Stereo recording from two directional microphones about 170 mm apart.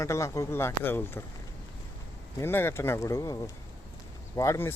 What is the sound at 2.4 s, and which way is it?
Speech, 15° left (ahead or behind).